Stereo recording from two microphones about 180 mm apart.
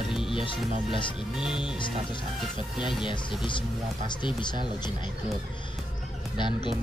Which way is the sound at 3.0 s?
25° left (ahead or behind).